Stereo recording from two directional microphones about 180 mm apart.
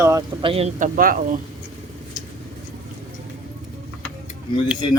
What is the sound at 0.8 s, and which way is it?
Speech, 50° right (ahead or behind).